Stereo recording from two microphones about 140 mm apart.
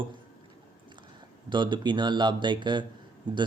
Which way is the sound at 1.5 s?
35° right (ahead or behind).